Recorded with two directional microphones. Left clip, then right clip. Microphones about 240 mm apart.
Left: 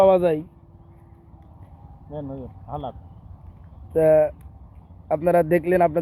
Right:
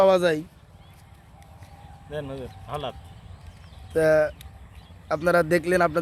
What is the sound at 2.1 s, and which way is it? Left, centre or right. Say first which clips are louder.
Speech: right 1 dB; right.